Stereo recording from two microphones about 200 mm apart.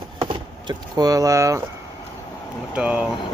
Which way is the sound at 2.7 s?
5° right (ahead or behind).